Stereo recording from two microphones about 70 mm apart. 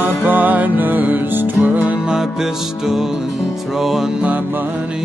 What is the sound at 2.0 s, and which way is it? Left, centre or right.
Music, centre.